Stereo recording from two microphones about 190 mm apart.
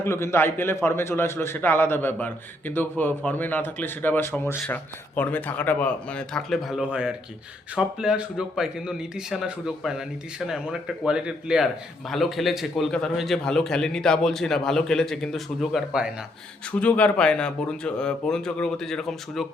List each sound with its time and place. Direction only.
0.0 s a man's voice: 15° left (ahead or behind); by 16.1 s 5° right (ahead or behind)
16.7 s a man's voice: 5° left (ahead or behind)